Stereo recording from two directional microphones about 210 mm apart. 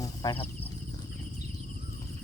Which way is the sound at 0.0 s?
20° left (ahead or behind).